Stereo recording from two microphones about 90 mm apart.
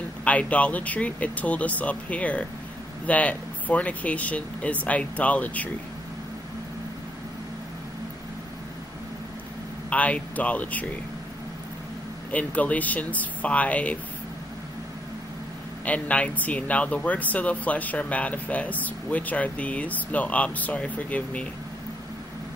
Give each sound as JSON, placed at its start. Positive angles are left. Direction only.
{"t": 0.2, "sound": "speech", "side_deg": 15}
{"t": 9.8, "sound": "speech", "side_deg": 15}
{"t": 12.3, "sound": "speech", "side_deg": 15}
{"t": 15.8, "sound": "speech", "side_deg": 15}